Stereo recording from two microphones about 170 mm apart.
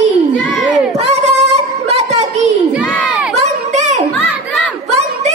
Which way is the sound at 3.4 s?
45° right (ahead or behind).